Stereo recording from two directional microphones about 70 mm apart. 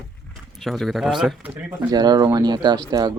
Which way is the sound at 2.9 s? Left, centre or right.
Right.